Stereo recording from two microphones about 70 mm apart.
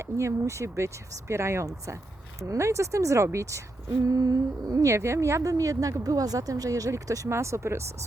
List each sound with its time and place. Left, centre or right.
0.0 s speech: right
4.0 s humming: right
4.9 s speech: right